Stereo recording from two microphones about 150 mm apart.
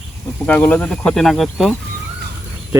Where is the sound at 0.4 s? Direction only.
10° left (ahead or behind).